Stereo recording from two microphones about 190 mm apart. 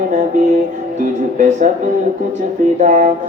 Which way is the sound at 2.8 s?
40° right (ahead or behind).